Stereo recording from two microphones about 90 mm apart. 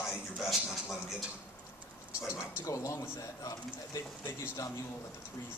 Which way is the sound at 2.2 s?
40° left (ahead or behind).